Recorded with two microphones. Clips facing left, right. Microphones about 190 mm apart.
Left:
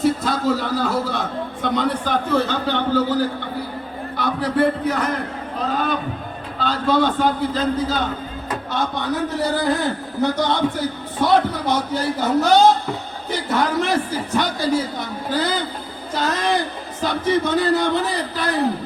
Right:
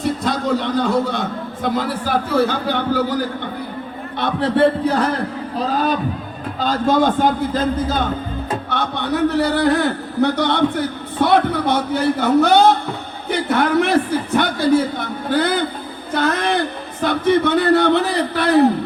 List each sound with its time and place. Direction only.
0.0 s a man's voice: 5° left (ahead or behind); by 3.2 s 10° right (ahead or behind)
4.2 s music: 25° right (ahead or behind)
5.5 s a man's voice: 35° right (ahead or behind)
9.3 s a man's voice: 65° right (ahead or behind)